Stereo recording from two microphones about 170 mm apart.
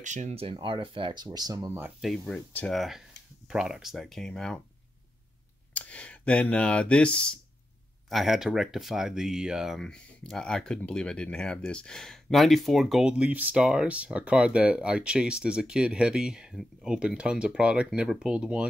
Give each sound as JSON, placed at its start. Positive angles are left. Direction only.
{"t": 0.0, "sound": "speech", "side_deg": -45}
{"t": 2.0, "sound": "speech", "side_deg": 0}
{"t": 5.7, "sound": "speech", "side_deg": 10}